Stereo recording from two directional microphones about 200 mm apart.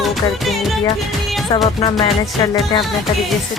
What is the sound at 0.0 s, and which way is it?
Music, centre (ahead or behind).